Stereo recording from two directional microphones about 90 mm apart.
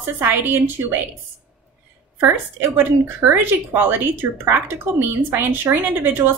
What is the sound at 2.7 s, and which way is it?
Speech, 25° right (ahead or behind).